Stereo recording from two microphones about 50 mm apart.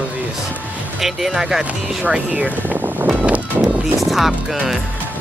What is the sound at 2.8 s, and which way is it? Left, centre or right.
Vehicle, right.